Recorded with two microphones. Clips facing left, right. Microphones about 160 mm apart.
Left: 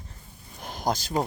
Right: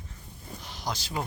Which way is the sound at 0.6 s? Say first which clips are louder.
Left 8 dB; 50° left (ahead or behind).